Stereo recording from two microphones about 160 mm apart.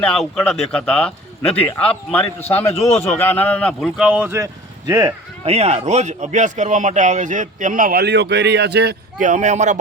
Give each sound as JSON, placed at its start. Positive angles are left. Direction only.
{"t": 0.0, "sound": "speech", "side_deg": 5}
{"t": 5.5, "sound": "speech", "side_deg": -40}
{"t": 9.2, "sound": "speech", "side_deg": -50}